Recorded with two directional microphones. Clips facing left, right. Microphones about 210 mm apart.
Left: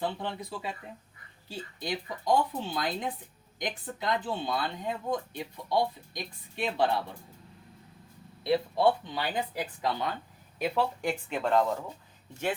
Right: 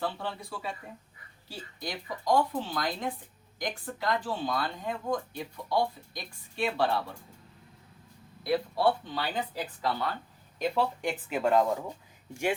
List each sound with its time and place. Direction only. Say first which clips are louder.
0.0 s speech: left 1 dB; 20° left (ahead or behind)
8.4 s speech: left 2 dB; 20° left (ahead or behind)
10.6 s speech: even; centre (ahead or behind)